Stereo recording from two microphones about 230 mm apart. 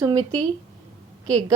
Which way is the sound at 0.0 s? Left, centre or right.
Centre.